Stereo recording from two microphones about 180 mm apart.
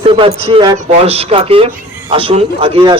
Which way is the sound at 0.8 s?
35° right (ahead or behind).